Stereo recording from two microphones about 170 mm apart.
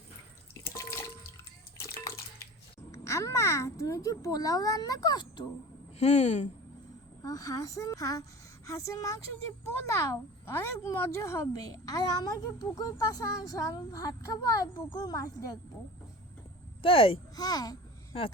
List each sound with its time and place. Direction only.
0.6 s drip: 15° left (ahead or behind)
2.9 s speech: 15° left (ahead or behind)
6.0 s a woman's voice: 40° left (ahead or behind)
7.2 s speech: 20° left (ahead or behind)
16.8 s speech: 35° left (ahead or behind)